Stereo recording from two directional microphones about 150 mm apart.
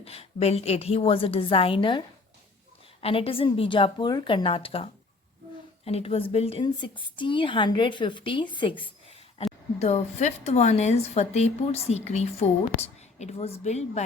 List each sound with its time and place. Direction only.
0.0 s a woman's voice: 40° left (ahead or behind)